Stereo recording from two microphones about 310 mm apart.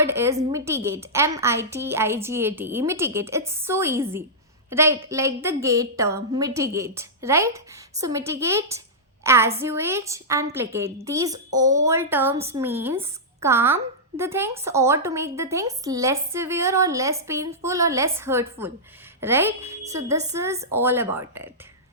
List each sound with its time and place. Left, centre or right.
0.0 s a woman's voice: centre
12.4 s a woman's voice: centre
12.6 s a woman's voice: centre